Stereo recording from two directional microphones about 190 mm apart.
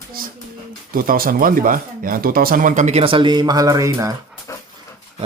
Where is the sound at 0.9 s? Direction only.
50° right (ahead or behind); by 4.2 s 15° right (ahead or behind).